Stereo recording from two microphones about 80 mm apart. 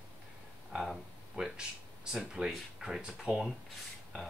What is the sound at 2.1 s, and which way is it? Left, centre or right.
Speech, centre.